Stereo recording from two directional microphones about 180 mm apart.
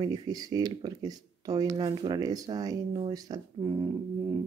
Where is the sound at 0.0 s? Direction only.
20° right (ahead or behind).